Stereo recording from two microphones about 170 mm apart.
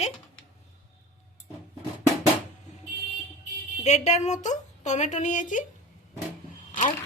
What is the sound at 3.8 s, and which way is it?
A woman's voice, 40° left (ahead or behind).